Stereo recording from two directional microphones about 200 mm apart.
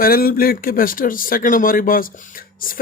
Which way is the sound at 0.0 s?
45° left (ahead or behind).